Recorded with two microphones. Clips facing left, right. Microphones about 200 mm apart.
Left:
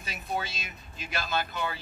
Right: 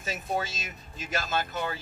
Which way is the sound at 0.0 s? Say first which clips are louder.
Right 3 dB; 45° right (ahead or behind).